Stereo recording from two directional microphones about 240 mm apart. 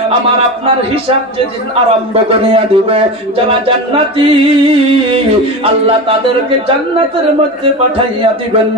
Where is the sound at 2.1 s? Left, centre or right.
Right.